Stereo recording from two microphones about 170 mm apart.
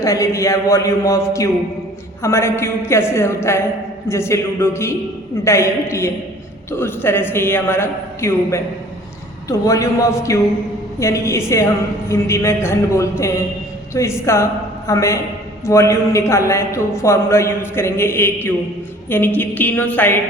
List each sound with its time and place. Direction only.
0.0 s a man's voice: 20° left (ahead or behind)